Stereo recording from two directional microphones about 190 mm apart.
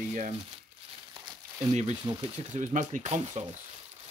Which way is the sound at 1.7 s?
40° right (ahead or behind).